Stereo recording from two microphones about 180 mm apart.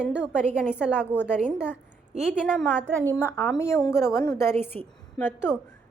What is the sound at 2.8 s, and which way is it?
Speech, 15° right (ahead or behind).